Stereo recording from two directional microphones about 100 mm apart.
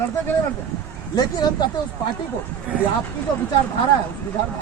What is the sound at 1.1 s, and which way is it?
Speech, 40° left (ahead or behind).